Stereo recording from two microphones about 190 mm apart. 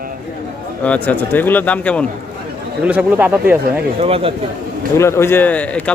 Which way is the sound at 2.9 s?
10° right (ahead or behind).